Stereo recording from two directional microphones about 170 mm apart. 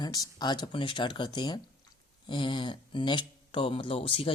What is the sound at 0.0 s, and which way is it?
Speech, 25° left (ahead or behind).